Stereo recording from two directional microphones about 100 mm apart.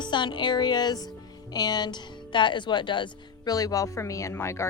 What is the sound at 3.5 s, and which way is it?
Speech, 40° left (ahead or behind).